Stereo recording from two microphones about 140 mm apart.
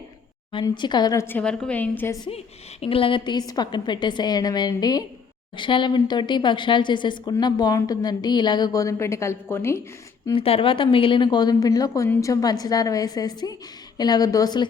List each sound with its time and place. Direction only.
0.7 s a woman's voice: 30° left (ahead or behind); by 2.1 s 10° left (ahead or behind)
2.8 s a woman's voice: 40° left (ahead or behind); by 9.8 s 20° left (ahead or behind)
10.3 s a woman's voice: 40° left (ahead or behind)